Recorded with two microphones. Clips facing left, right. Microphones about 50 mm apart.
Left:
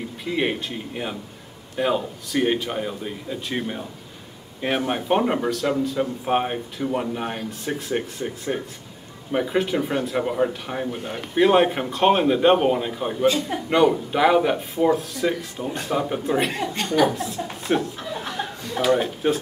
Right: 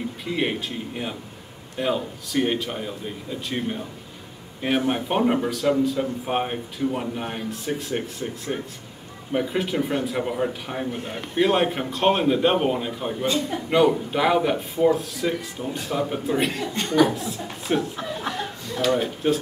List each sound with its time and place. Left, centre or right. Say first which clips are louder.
0.2 s speech: left 2 dB; centre